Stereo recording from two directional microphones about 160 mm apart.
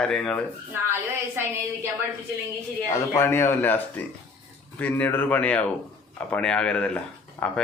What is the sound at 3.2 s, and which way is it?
Speech, 15° left (ahead or behind).